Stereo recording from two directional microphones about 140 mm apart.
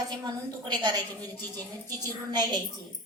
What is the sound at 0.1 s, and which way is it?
A woman's voice, 30° right (ahead or behind).